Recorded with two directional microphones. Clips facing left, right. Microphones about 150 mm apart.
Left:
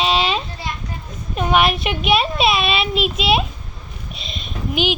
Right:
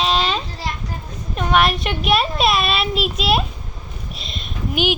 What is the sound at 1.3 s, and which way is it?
A child's voice, 5° left (ahead or behind).